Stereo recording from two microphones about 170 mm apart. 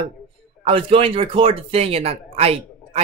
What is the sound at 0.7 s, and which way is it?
Speech, 35° right (ahead or behind).